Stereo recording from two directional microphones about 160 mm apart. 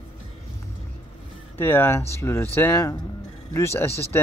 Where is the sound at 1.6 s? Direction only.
15° left (ahead or behind).